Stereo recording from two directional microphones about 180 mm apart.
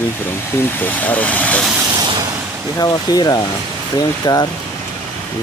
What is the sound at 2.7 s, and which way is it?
Speech, 20° left (ahead or behind).